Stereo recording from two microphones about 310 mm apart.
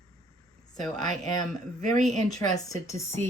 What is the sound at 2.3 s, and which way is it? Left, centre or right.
Speech, centre.